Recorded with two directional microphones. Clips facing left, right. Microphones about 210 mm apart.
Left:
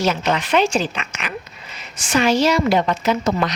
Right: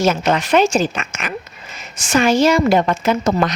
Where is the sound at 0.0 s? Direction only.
45° right (ahead or behind).